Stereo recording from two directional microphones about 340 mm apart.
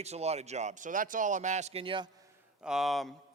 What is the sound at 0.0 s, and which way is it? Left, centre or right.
A man's voice, centre.